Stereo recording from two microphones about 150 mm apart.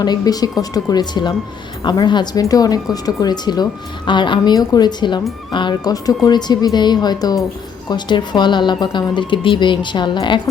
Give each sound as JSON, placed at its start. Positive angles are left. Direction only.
{"t": 0.0, "sound": "a woman's voice", "side_deg": 25}